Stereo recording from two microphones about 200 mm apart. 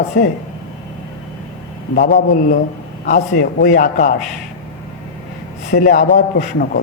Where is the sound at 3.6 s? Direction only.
45° left (ahead or behind).